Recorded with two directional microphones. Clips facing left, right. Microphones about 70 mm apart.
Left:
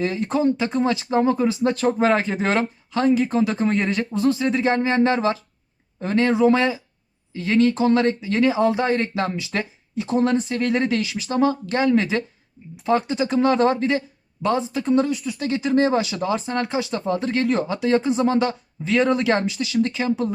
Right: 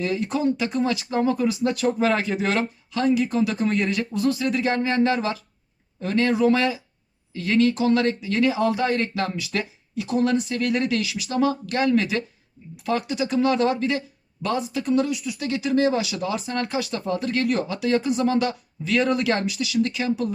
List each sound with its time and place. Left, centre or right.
0.0 s speech: left